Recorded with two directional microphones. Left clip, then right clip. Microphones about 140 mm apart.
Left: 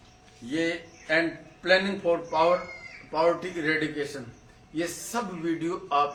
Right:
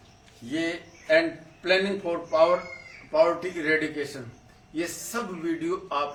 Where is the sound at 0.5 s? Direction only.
25° left (ahead or behind).